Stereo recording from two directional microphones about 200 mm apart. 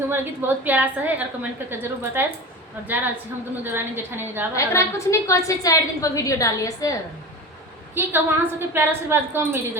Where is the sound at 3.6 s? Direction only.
10° right (ahead or behind).